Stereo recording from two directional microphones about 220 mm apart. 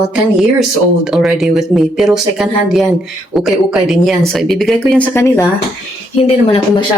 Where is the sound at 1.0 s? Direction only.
Centre (ahead or behind).